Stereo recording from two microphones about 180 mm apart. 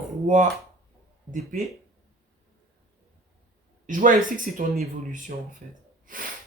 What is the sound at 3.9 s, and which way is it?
Speech, 50° right (ahead or behind).